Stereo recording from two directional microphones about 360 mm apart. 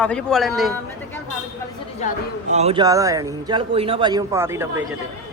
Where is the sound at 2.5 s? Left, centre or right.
Centre.